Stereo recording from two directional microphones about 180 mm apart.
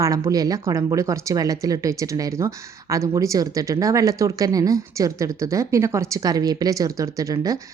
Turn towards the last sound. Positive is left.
turn(degrees=-20)  # may be behind; listen again after turning